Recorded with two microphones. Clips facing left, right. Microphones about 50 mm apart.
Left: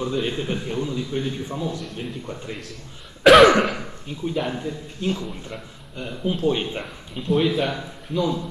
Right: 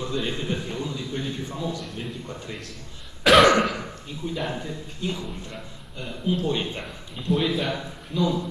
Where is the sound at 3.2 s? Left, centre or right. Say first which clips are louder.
Left 4 dB; centre.